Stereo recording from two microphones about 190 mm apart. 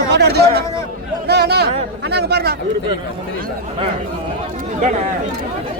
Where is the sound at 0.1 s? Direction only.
60° right (ahead or behind).